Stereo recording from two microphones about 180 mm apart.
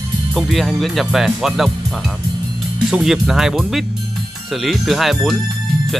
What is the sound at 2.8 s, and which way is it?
Speech, centre (ahead or behind).